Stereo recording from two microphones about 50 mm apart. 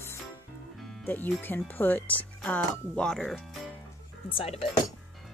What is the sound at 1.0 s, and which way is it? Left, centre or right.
Speech, left.